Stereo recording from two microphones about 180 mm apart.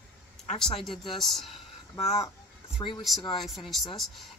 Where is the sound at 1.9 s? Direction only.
35° left (ahead or behind).